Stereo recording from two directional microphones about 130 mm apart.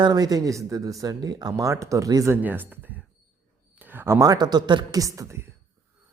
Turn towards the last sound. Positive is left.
turn(degrees=-25)  # may be behind; listen again after turning